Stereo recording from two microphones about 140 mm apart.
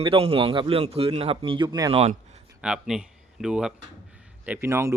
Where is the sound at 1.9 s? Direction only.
50° right (ahead or behind).